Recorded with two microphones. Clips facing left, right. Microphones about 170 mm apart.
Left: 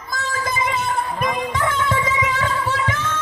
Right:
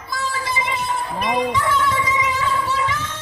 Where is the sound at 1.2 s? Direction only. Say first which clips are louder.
Right 4 dB; 50° left (ahead or behind).